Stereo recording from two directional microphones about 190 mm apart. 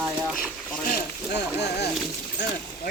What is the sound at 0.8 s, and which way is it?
Speech, 55° left (ahead or behind).